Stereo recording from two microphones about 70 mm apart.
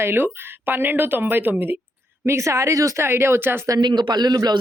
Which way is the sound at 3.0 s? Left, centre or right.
Right.